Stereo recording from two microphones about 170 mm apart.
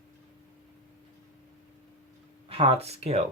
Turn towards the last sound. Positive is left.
turn(degrees=-40)  # may be behind; listen again after turning